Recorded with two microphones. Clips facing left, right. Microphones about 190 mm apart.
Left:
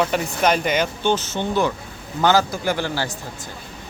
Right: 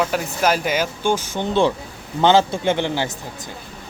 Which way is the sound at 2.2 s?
25° right (ahead or behind).